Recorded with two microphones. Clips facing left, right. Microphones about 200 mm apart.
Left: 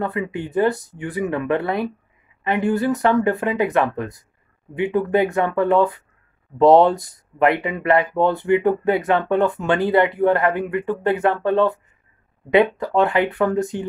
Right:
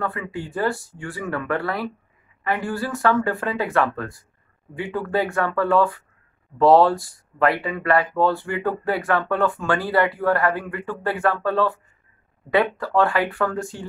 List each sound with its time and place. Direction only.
0.0 s speech: 20° left (ahead or behind)